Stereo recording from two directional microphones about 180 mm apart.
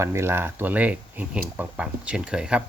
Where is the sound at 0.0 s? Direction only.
15° right (ahead or behind).